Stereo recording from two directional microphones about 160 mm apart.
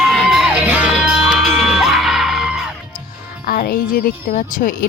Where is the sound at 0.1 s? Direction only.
Centre (ahead or behind).